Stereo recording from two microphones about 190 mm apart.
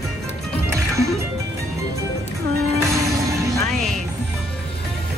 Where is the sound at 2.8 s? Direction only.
15° right (ahead or behind).